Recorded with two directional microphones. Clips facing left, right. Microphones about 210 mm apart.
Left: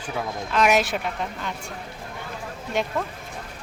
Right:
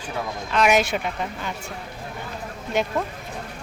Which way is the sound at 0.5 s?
Centre (ahead or behind).